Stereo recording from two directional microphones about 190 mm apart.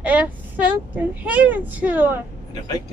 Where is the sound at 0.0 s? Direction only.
5° right (ahead or behind).